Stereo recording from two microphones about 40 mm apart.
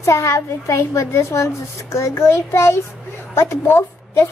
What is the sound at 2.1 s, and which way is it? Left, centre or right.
A child's voice, left.